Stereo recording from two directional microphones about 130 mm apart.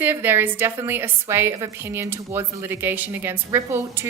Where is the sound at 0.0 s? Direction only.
15° right (ahead or behind).